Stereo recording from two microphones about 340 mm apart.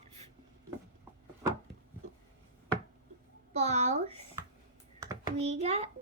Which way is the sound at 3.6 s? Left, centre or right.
Centre.